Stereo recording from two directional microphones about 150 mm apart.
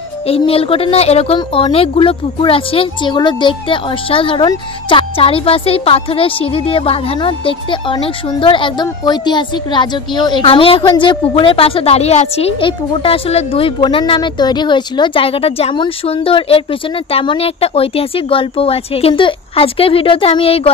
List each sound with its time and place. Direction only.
0.3 s speech: 40° left (ahead or behind)